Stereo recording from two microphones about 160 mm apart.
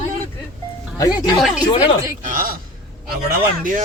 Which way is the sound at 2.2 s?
60° right (ahead or behind).